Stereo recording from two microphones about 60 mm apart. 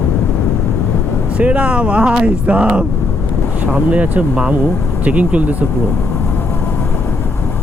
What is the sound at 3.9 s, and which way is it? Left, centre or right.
Speech, right.